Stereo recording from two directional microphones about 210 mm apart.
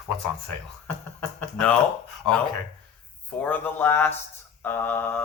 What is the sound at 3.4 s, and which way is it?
Speech, 10° left (ahead or behind).